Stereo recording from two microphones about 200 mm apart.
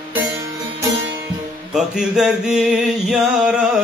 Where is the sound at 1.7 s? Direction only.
Centre (ahead or behind).